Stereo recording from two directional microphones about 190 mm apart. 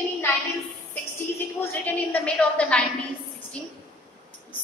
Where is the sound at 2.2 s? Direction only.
5° left (ahead or behind).